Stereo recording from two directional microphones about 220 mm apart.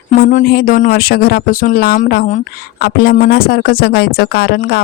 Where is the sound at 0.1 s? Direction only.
35° left (ahead or behind).